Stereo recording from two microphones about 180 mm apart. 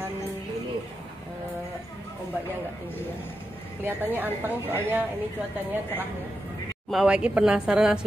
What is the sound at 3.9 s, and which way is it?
Speech, 10° right (ahead or behind).